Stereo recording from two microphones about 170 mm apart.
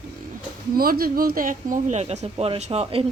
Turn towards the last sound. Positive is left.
turn(degrees=-35)  # may be behind; listen again after turning